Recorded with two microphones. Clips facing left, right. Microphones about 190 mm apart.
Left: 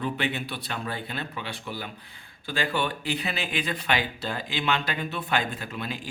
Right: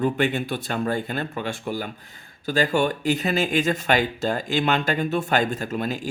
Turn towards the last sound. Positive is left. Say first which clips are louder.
# right 7 dB
turn(degrees=-45)  # may be behind; listen again after turning